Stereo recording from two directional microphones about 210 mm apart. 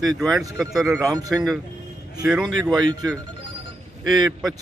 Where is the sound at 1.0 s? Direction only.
15° right (ahead or behind).